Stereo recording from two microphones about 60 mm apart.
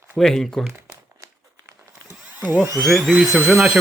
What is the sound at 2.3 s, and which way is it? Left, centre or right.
Dental drill, right.